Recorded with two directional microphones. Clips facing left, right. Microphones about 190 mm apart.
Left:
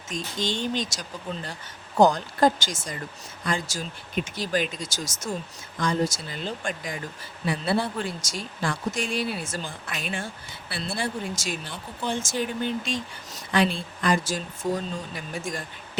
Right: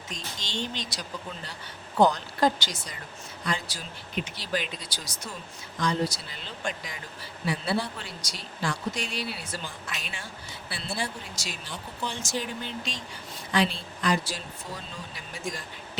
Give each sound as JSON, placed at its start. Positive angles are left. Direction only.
{"t": 0.1, "sound": "speech", "side_deg": 50}